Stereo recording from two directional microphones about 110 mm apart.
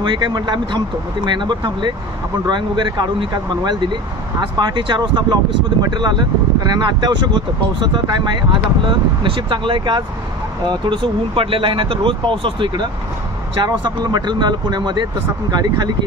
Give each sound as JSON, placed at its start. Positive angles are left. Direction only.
{"t": 0.0, "sound": "speech", "side_deg": -45}